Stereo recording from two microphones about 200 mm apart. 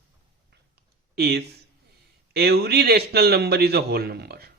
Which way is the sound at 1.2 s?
55° right (ahead or behind).